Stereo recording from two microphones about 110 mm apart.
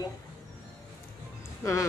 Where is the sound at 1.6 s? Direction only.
30° left (ahead or behind).